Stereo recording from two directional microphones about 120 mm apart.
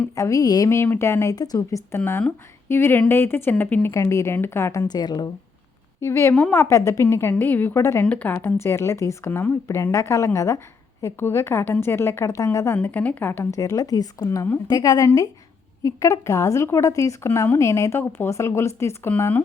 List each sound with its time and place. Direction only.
0.2 s a woman's voice: 30° left (ahead or behind)
6.0 s a woman's voice: 20° left (ahead or behind)
6.3 s a woman's voice: 10° left (ahead or behind)
6.6 s a woman's voice: 25° left (ahead or behind)